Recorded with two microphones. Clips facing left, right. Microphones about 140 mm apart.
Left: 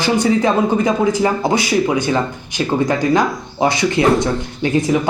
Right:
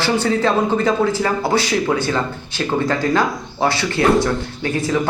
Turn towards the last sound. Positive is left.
turn(degrees=20)  # may be behind; listen again after turning